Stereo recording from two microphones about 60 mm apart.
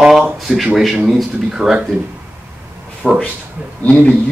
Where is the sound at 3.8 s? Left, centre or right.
Left.